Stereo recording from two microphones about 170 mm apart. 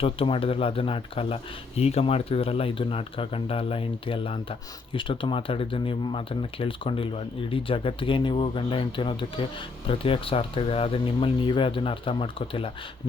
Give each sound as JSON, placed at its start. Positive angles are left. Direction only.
{"t": 0.0, "sound": "speech", "side_deg": 30}